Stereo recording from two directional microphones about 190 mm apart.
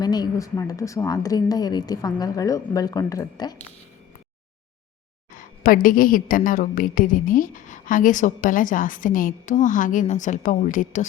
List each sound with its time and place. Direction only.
0.0 s a woman's voice: 20° left (ahead or behind)
5.3 s a woman's voice: 45° left (ahead or behind)